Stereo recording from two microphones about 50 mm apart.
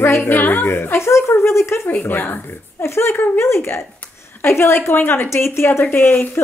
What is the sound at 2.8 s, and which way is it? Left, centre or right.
A woman's voice, left.